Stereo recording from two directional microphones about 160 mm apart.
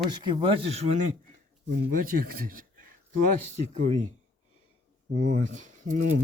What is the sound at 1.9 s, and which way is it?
Speech, 65° right (ahead or behind).